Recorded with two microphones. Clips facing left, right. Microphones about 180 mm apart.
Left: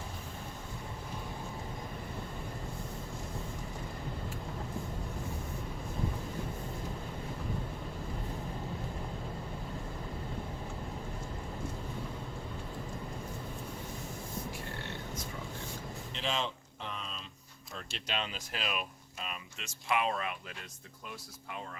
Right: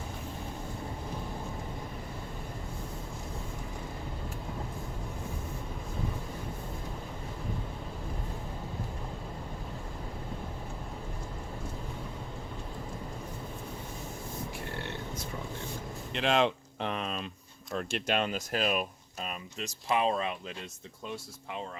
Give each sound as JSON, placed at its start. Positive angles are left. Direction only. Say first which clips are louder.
{"t": 16.1, "sound": "a sound", "louder": "right 9 dB", "side_deg": -70}
{"t": 17.7, "sound": "speech", "louder": "right 8 dB", "side_deg": -55}
{"t": 19.9, "sound": "speech", "louder": "right 4 dB", "side_deg": -25}